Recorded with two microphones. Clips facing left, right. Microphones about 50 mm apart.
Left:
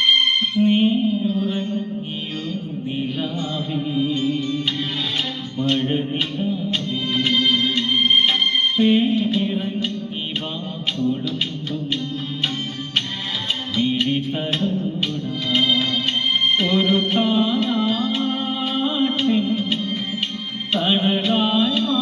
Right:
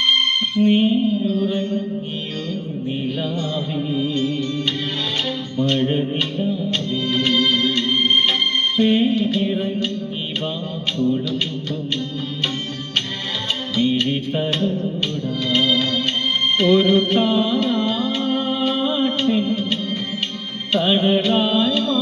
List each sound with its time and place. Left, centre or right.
0.5 s music: centre
3.9 s music: centre
5.7 s music: centre
13.8 s music: centre
15.4 s music: centre